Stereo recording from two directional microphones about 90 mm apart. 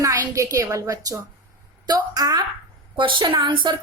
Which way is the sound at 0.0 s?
35° right (ahead or behind).